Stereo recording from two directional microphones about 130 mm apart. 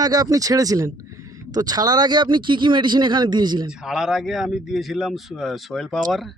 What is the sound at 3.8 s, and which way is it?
A man's voice, 5° right (ahead or behind).